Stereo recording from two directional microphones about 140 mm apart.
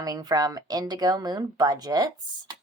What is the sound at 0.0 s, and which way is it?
Speech, 30° right (ahead or behind).